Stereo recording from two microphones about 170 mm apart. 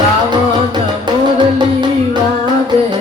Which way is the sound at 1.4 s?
25° right (ahead or behind).